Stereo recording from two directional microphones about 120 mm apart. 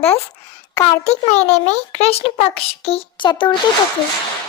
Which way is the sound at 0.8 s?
65° left (ahead or behind).